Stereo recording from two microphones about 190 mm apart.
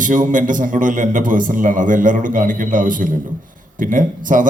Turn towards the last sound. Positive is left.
turn(degrees=-45)  # may be behind; listen again after turning